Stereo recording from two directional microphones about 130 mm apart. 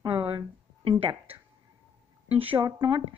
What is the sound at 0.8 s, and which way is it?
Speech, 45° right (ahead or behind).